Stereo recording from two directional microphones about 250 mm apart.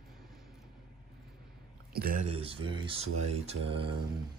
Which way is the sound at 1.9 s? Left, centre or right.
Right.